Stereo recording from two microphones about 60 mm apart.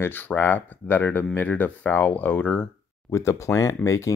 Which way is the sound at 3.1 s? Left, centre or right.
Left.